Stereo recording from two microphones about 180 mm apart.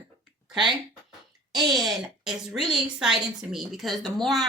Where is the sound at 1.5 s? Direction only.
Centre (ahead or behind).